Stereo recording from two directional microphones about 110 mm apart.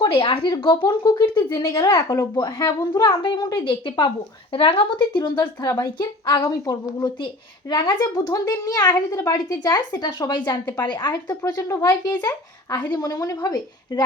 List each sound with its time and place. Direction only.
0.1 s speech: 55° left (ahead or behind)
1.8 s a woman's voice: 30° left (ahead or behind); by 11.1 s 45° left (ahead or behind)
11.3 s a woman's voice: 35° left (ahead or behind)